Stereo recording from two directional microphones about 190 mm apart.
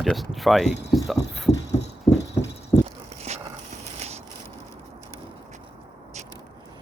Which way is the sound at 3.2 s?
35° right (ahead or behind).